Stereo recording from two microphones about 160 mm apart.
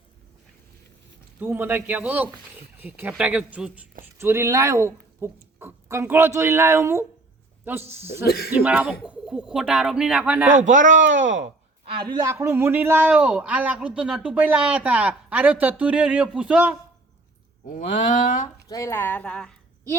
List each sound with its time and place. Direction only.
1.4 s a man's voice: 15° right (ahead or behind)
8.2 s speech: 75° left (ahead or behind)
8.5 s a man's voice: 10° right (ahead or behind)
10.6 s speech: 50° right (ahead or behind)
12.0 s a man's voice: 25° right (ahead or behind); by 16.7 s 10° right (ahead or behind)
17.7 s speech: 55° left (ahead or behind)
18.7 s speech: 20° left (ahead or behind)